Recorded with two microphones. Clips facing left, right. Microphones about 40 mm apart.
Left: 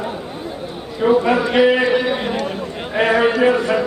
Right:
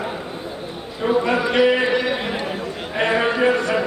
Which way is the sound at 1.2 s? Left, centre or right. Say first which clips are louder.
Left 3 dB; centre.